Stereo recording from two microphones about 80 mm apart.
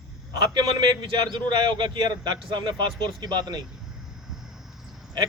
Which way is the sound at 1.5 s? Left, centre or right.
Right.